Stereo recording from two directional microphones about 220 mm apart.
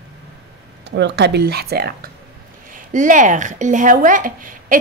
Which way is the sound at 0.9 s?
50° right (ahead or behind).